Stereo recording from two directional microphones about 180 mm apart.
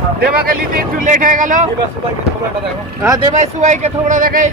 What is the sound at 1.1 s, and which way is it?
Speech, 45° right (ahead or behind).